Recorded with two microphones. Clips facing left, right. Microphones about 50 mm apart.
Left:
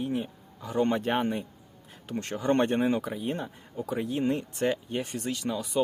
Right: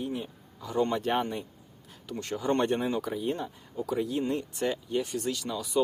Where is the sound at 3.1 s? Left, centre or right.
Centre.